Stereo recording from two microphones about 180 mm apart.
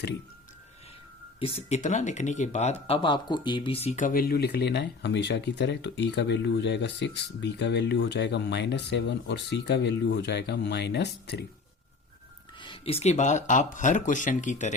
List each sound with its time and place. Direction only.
1.4 s speech: 35° left (ahead or behind); by 11.4 s 70° left (ahead or behind)
12.5 s speech: 30° left (ahead or behind)